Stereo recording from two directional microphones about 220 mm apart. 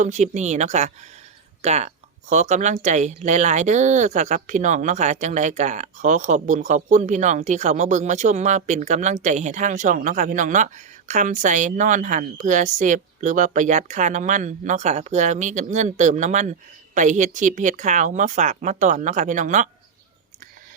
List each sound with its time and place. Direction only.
0.0 s a woman's voice: 35° right (ahead or behind)